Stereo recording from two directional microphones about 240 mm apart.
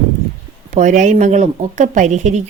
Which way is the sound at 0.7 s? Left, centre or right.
Right.